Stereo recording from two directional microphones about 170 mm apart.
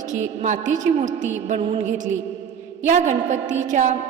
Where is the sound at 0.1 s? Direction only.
45° right (ahead or behind).